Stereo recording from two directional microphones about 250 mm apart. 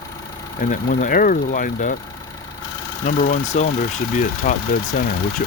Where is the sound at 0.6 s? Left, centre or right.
Left.